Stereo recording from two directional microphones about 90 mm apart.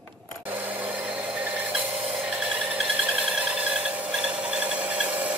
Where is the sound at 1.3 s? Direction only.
15° right (ahead or behind).